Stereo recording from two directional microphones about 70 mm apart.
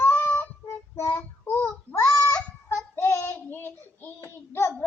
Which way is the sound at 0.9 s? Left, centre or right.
Left.